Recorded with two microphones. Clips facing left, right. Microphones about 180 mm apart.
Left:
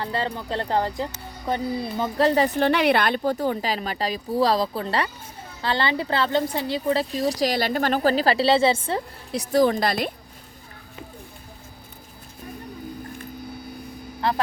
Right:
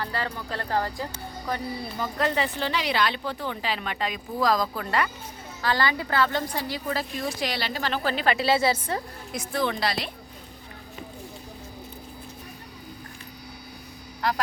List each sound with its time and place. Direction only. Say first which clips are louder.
0.0 s a woman's voice: left 4 dB; 25° left (ahead or behind)
2.6 s a woman's voice: left 7 dB; 55° left (ahead or behind); by 9.4 s 25° left (ahead or behind)
9.5 s speech: left 8 dB; 40° left (ahead or behind)
14.2 s a woman's voice: left 3 dB; 30° left (ahead or behind)